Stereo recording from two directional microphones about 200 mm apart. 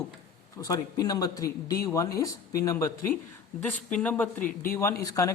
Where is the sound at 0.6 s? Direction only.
20° left (ahead or behind).